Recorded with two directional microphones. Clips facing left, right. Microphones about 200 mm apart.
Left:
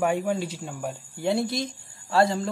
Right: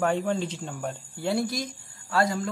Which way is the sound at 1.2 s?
25° left (ahead or behind).